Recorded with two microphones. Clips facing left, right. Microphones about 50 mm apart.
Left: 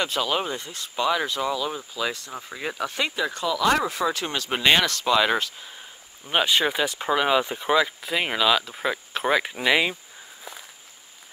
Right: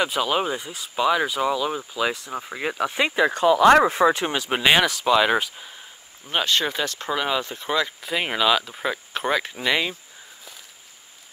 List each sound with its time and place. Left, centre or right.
0.0 s speech: centre
3.2 s speech: right
4.4 s speech: centre
6.2 s speech: centre